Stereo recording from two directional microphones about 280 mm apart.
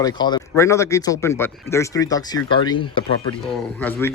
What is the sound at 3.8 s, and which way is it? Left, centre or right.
Speech, centre.